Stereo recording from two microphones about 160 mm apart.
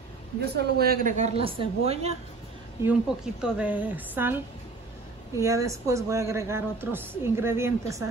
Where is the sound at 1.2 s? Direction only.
35° right (ahead or behind).